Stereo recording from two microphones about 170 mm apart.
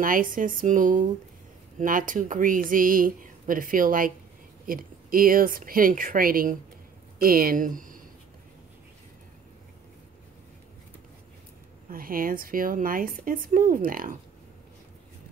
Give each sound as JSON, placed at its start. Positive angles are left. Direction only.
{"t": 0.0, "sound": "speech", "side_deg": -55}
{"t": 11.9, "sound": "speech", "side_deg": -55}